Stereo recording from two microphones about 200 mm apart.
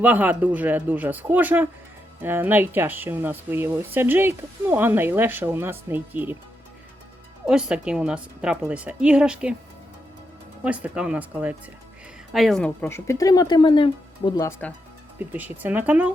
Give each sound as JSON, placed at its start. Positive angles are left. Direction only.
{"t": 0.0, "sound": "speech", "side_deg": -10}
{"t": 7.4, "sound": "a woman's voice", "side_deg": -5}
{"t": 10.6, "sound": "speech", "side_deg": -5}
{"t": 15.2, "sound": "speech", "side_deg": -10}